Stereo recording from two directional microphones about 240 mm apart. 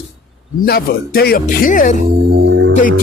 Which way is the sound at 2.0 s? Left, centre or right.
Right.